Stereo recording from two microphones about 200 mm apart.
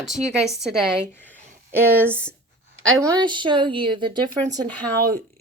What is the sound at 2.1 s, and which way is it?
Speech, 5° left (ahead or behind).